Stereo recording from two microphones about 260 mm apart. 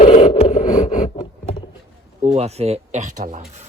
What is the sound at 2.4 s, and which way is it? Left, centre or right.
Speech, right.